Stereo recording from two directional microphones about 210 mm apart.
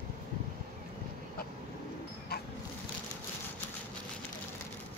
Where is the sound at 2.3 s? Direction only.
50° left (ahead or behind).